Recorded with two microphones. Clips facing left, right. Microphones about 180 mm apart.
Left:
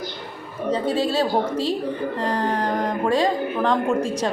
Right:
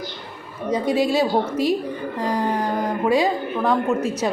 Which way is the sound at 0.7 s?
10° right (ahead or behind).